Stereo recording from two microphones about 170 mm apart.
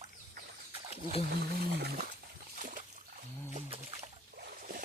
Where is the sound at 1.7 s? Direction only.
65° right (ahead or behind).